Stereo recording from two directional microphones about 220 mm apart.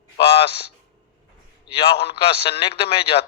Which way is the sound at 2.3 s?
25° left (ahead or behind).